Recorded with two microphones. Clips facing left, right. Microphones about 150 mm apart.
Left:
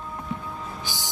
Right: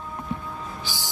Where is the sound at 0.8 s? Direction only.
20° left (ahead or behind).